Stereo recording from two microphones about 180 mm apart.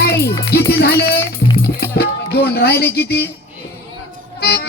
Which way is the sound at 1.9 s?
60° left (ahead or behind).